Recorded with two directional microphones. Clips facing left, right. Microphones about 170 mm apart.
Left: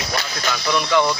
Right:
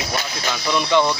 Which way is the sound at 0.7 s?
20° right (ahead or behind).